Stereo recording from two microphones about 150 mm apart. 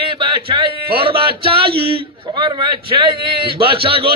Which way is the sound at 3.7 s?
35° right (ahead or behind).